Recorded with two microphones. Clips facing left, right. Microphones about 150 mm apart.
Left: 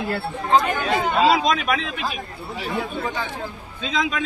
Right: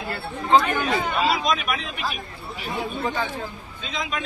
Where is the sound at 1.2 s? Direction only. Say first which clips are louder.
Left 5 dB; 90° left.